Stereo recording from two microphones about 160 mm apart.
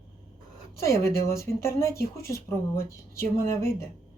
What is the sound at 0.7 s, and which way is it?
Speech, 20° left (ahead or behind).